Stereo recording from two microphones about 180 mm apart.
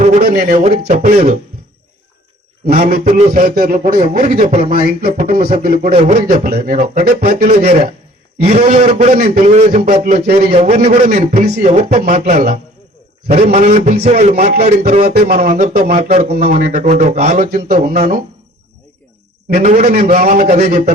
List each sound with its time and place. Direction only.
0.2 s a man's voice: 55° right (ahead or behind)
2.9 s music: 50° right (ahead or behind)
4.2 s a man's voice: 45° right (ahead or behind)
4.7 s music: 55° right (ahead or behind)
5.9 s a man's voice: 35° right (ahead or behind); by 10.3 s 55° right (ahead or behind)
10.3 s a man's voice: 35° right (ahead or behind)
14.3 s a man's voice: 55° right (ahead or behind)
14.6 s a man's voice: 40° right (ahead or behind)
15.8 s a man's voice: 40° right (ahead or behind)
19.5 s a man's voice: 45° right (ahead or behind)